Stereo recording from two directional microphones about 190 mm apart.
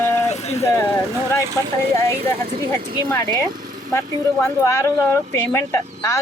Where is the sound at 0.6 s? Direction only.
15° left (ahead or behind).